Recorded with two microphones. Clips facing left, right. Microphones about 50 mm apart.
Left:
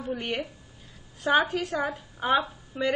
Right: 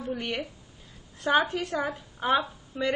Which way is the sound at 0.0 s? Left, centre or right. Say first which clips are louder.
Left 1 dB; centre.